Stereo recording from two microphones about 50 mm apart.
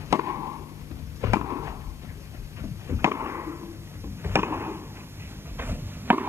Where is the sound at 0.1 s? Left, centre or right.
Right.